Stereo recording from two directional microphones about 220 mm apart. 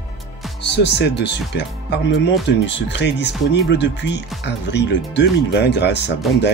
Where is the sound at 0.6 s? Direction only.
50° left (ahead or behind).